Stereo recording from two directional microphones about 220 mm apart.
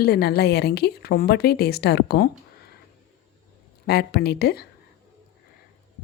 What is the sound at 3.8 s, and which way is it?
Speech, 45° left (ahead or behind).